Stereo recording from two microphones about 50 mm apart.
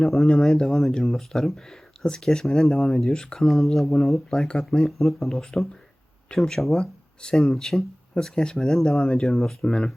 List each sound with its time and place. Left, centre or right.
0.0 s speech: centre
9.3 s speech: centre